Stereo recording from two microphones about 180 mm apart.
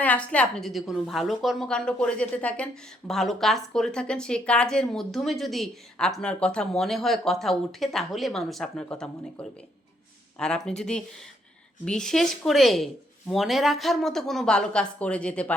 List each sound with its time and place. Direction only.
0.0 s a woman's voice: 10° left (ahead or behind)